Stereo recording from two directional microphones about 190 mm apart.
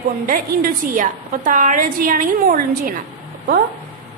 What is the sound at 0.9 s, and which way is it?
A woman's voice, 45° right (ahead or behind).